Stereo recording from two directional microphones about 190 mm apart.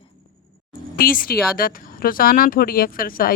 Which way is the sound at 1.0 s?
50° left (ahead or behind).